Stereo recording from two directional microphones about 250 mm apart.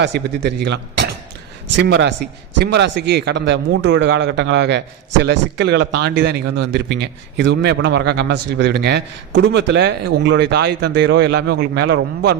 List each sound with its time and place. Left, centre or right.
0.0 s speech: right